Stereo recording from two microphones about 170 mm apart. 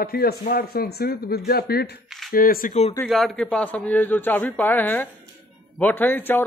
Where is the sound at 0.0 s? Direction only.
65° left (ahead or behind).